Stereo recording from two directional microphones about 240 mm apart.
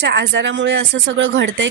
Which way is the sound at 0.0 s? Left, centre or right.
Right.